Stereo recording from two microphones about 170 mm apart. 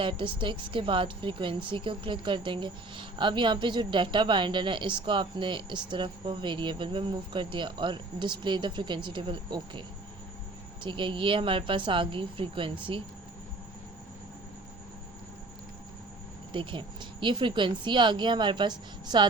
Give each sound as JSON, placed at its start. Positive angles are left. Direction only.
{"t": 0.0, "sound": "a woman's voice", "side_deg": -30}
{"t": 10.8, "sound": "speech", "side_deg": -30}
{"t": 16.5, "sound": "a woman's voice", "side_deg": -30}